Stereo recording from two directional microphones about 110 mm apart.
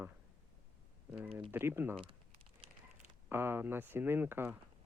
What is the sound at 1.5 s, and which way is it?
Speech, 20° right (ahead or behind).